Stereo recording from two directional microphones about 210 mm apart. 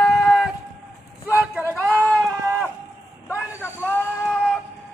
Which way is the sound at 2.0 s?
5° left (ahead or behind).